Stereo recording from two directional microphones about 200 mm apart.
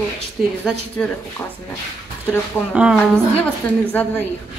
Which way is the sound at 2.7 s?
Centre (ahead or behind).